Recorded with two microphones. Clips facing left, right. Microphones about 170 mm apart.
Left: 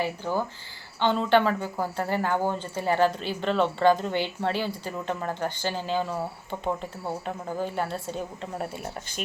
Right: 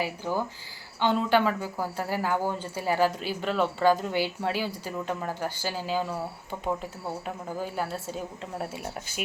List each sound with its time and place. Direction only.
0.0 s speech: 10° right (ahead or behind)
7.3 s speech: 5° right (ahead or behind)